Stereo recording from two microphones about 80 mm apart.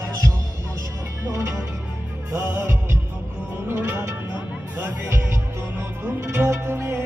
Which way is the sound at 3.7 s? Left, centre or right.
Centre.